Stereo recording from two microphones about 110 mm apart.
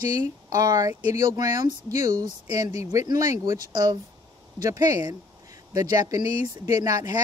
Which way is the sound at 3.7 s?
40° right (ahead or behind).